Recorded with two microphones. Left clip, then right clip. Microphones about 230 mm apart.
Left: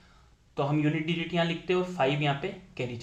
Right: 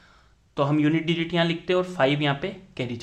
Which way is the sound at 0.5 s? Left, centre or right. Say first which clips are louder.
Right 6 dB; right.